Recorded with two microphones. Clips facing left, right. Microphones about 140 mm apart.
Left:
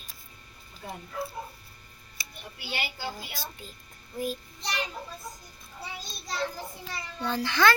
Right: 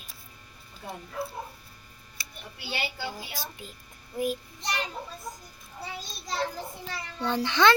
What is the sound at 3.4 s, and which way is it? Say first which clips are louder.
Speech: right 1 dB; 15° right (ahead or behind).